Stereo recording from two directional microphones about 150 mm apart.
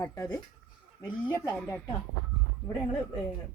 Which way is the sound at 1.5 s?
15° left (ahead or behind).